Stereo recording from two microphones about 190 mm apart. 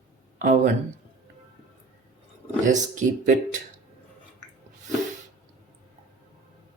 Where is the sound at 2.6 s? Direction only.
40° right (ahead or behind).